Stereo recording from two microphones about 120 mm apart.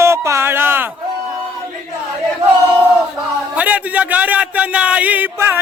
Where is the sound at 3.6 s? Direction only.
10° right (ahead or behind).